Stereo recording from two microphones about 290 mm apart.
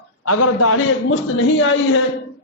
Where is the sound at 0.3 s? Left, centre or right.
Left.